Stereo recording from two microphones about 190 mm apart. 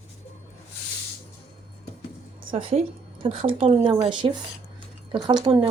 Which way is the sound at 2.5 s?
30° right (ahead or behind).